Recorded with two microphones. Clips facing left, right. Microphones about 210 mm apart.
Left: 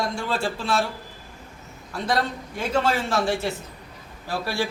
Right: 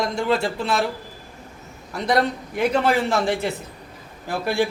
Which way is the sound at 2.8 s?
15° right (ahead or behind).